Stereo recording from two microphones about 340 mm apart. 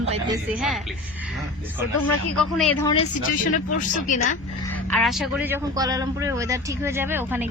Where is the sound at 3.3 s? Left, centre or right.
Left.